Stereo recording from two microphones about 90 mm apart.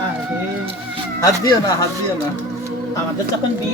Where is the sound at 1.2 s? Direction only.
40° left (ahead or behind).